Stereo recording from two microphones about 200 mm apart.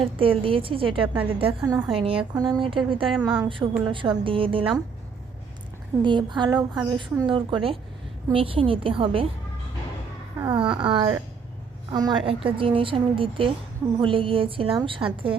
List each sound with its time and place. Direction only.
0.0 s a woman's voice: 25° right (ahead or behind)
3.1 s a woman's voice: 5° right (ahead or behind)
3.4 s a woman's voice: 20° right (ahead or behind)
6.0 s a woman's voice: 25° right (ahead or behind)
10.5 s a woman's voice: 25° right (ahead or behind)